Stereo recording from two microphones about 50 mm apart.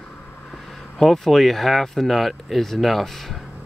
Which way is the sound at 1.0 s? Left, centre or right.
Centre.